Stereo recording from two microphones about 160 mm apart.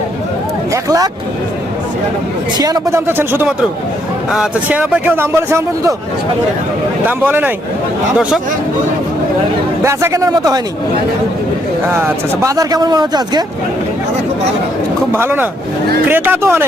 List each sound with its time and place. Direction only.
0.7 s speech: 20° right (ahead or behind)
2.6 s speech: 20° right (ahead or behind)
7.0 s speech: 10° right (ahead or behind)
9.8 s speech: 20° right (ahead or behind)
11.9 s speech: 15° right (ahead or behind)
15.1 s speech: 15° right (ahead or behind)